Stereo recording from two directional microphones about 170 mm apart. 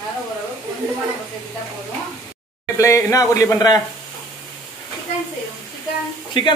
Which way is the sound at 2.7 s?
20° left (ahead or behind).